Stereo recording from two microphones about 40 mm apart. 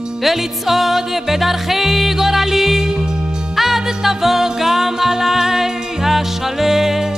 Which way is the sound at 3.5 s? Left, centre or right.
Centre.